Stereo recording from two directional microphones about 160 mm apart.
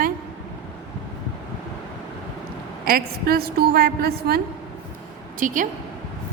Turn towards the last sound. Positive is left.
turn(degrees=-55)  # may be behind; listen again after turning